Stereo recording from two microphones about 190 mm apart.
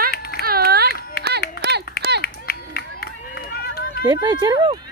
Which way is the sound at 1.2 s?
55° left (ahead or behind).